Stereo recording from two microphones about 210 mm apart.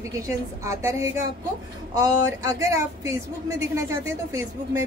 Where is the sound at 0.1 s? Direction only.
15° right (ahead or behind).